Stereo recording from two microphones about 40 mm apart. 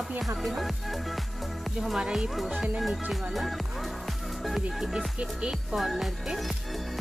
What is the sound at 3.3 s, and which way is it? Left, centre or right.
Music, centre.